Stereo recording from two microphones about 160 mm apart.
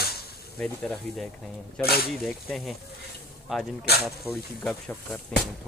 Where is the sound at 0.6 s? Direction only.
5° left (ahead or behind).